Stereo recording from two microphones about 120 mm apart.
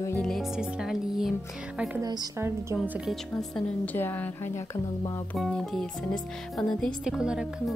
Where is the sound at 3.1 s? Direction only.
5° left (ahead or behind).